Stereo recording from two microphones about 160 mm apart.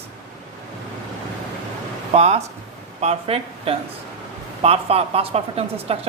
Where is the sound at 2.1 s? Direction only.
40° right (ahead or behind).